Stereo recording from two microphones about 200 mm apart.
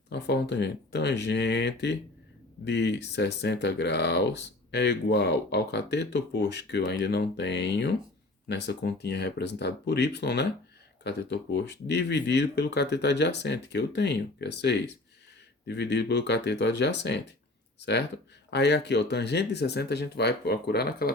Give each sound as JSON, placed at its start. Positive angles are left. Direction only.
{"t": 0.1, "sound": "speech", "side_deg": 55}